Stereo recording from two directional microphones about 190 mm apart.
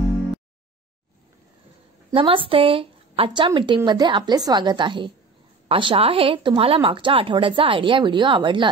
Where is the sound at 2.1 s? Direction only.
30° right (ahead or behind).